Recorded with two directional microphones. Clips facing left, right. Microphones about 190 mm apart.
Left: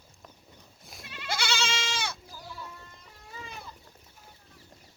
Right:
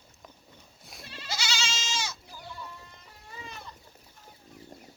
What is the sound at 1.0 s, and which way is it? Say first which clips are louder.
Goat: even; 30° right (ahead or behind).